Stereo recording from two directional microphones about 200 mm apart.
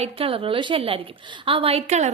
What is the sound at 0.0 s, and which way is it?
A woman's voice, 30° right (ahead or behind).